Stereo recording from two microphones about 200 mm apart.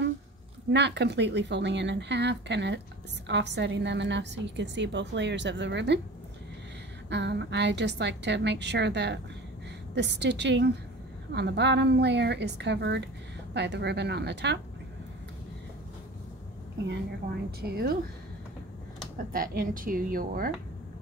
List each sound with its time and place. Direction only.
0.7 s a woman's voice: 60° right (ahead or behind)
7.1 s a woman's voice: 60° right (ahead or behind)
17.6 s speech: 50° right (ahead or behind)
19.1 s speech: 45° right (ahead or behind)